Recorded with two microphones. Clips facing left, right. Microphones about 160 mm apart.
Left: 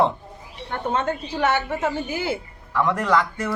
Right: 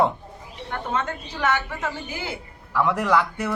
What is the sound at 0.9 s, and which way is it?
Speech, 25° left (ahead or behind).